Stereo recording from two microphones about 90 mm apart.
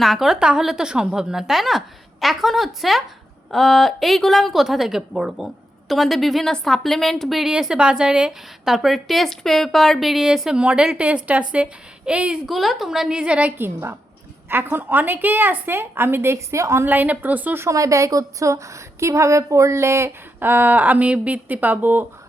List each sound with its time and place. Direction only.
0.0 s a woman's voice: centre (ahead or behind)
12.5 s a woman's voice: centre (ahead or behind)
13.6 s a woman's voice: 25° right (ahead or behind)
16.8 s a woman's voice: 20° right (ahead or behind)
17.7 s a woman's voice: 40° right (ahead or behind); by 22.0 s 20° right (ahead or behind)